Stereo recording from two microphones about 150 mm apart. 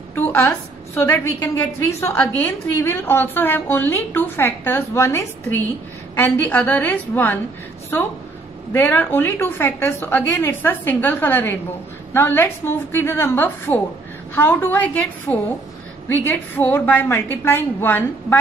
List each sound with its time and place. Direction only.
0.1 s a sound: 15° left (ahead or behind)
1.8 s a woman's voice: 15° left (ahead or behind)
8.7 s a woman's voice: 15° left (ahead or behind)